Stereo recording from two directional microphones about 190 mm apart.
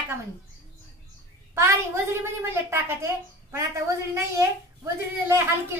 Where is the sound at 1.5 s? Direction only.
15° right (ahead or behind).